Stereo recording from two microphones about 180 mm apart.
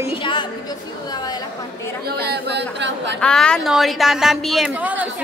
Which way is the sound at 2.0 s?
60° right (ahead or behind).